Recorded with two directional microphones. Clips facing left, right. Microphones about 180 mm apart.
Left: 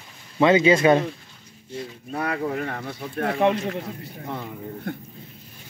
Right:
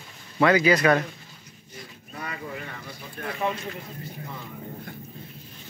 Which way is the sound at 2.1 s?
60° left (ahead or behind).